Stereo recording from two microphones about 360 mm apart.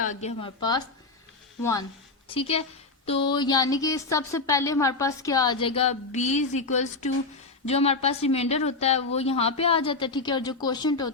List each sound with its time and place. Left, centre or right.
0.0 s a woman's voice: centre
2.3 s a woman's voice: centre